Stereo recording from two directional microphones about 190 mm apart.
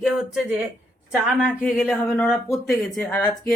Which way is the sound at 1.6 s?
5° left (ahead or behind).